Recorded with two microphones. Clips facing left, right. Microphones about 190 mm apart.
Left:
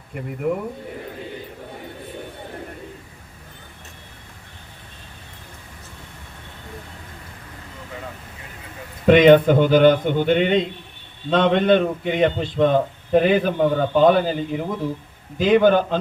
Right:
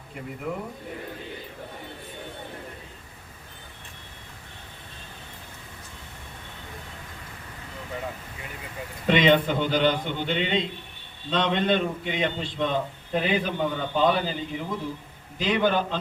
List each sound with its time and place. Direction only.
0.4 s a man's voice: 55° left (ahead or behind)
9.0 s a man's voice: 50° left (ahead or behind)